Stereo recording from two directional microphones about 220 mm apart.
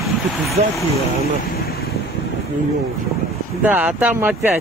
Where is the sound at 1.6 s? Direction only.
45° left (ahead or behind).